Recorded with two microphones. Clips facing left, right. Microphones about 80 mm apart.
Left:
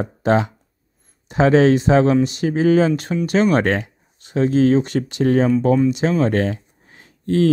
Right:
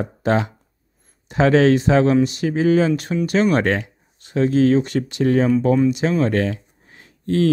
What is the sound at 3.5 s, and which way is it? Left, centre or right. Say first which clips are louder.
Speech: left 1 dB; left.